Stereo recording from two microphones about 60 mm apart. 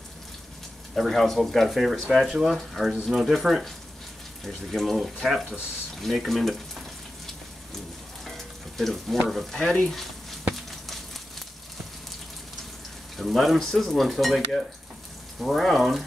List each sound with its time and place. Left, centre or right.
0.9 s speech: centre
8.7 s speech: centre
10.5 s a sound: centre
13.1 s speech: centre